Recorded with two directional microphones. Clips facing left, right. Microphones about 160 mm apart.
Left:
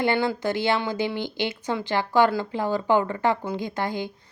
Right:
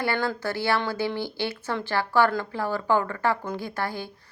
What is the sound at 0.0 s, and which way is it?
A woman's voice, 20° left (ahead or behind).